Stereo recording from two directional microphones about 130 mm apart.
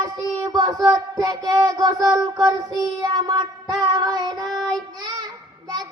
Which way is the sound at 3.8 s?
30° right (ahead or behind).